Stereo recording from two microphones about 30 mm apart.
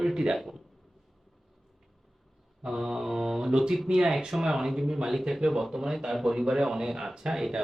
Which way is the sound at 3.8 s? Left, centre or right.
Right.